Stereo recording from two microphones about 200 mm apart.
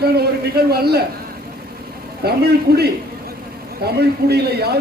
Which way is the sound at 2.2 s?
50° right (ahead or behind).